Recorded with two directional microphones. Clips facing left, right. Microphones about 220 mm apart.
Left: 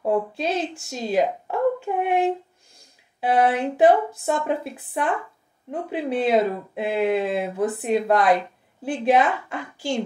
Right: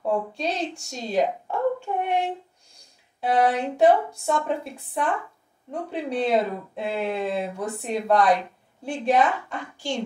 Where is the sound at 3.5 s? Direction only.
5° left (ahead or behind).